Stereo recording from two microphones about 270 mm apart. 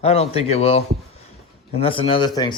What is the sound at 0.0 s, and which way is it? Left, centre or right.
Speech, left.